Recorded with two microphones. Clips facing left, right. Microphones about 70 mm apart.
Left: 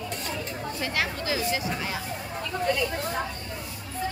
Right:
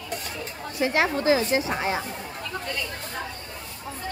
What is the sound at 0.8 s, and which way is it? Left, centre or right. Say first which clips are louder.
Speech: right 9 dB; right.